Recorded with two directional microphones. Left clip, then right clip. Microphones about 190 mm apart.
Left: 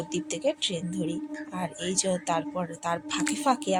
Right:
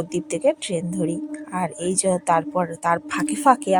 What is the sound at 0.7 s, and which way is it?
Speech, 60° right (ahead or behind).